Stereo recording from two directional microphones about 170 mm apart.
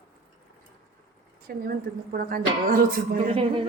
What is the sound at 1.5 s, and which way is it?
Speech, 60° right (ahead or behind).